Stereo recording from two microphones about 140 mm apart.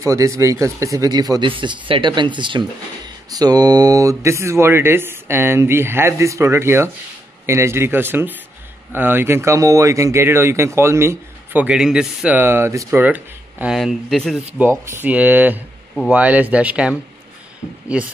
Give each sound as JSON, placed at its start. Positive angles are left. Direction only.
{"t": 0.0, "sound": "speech", "side_deg": -20}
{"t": 12.4, "sound": "speech", "side_deg": -15}
{"t": 13.7, "sound": "speech", "side_deg": 0}
{"t": 14.6, "sound": "speech", "side_deg": -15}